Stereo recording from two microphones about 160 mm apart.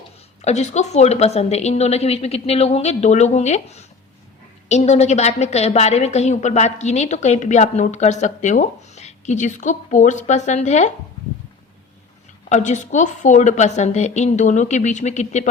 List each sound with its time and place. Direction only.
0.4 s a woman's voice: 45° left (ahead or behind)
12.5 s a woman's voice: 50° left (ahead or behind)